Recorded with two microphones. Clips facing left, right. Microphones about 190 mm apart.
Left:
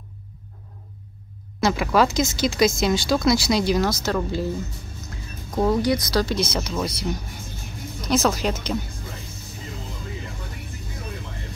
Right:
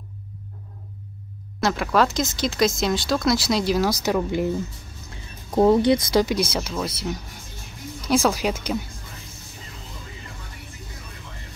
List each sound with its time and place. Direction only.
1.6 s speech: centre (ahead or behind)
3.9 s speech: 15° right (ahead or behind)
5.5 s speech: 25° right (ahead or behind)
6.2 s speech: 10° right (ahead or behind)
8.1 s speech: 10° right (ahead or behind)